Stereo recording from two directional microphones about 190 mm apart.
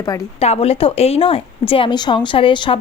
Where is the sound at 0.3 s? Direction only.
35° left (ahead or behind).